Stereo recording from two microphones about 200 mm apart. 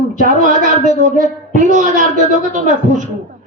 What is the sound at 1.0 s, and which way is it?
Speech, 40° right (ahead or behind).